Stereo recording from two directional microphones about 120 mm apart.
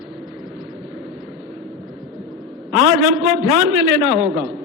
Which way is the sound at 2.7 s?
5° right (ahead or behind).